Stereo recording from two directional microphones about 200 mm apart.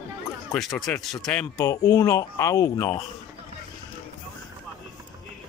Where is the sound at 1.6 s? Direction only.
15° left (ahead or behind).